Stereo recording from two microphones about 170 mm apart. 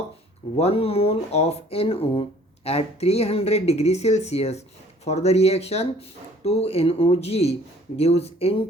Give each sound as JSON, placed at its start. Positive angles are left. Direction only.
{"t": 0.5, "sound": "speech", "side_deg": 35}